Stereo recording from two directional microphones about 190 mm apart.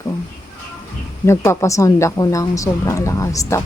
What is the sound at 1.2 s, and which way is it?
Speech, 15° left (ahead or behind).